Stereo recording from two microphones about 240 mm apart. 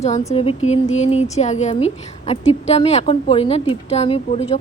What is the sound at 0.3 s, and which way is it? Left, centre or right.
Speech, left.